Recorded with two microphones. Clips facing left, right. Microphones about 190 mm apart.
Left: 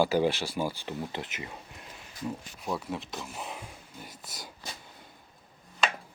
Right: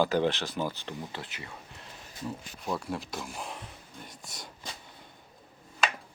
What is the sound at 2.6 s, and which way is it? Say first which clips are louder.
Speech: even; centre (ahead or behind).